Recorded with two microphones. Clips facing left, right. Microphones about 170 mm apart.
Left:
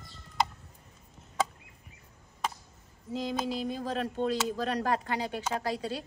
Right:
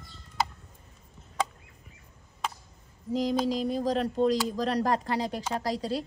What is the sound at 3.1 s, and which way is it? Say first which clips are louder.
Speech: right 5 dB; 40° right (ahead or behind).